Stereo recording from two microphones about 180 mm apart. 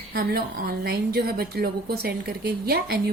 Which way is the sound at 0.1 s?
60° right (ahead or behind).